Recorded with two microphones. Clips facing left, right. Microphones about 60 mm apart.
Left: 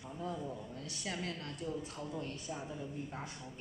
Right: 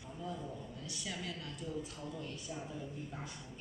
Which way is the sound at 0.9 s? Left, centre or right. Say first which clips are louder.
Left 3 dB; left.